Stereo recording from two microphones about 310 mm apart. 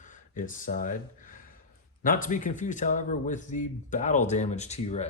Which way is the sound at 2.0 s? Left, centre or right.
Left.